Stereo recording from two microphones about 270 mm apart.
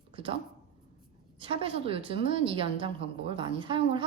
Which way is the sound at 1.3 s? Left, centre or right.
Centre.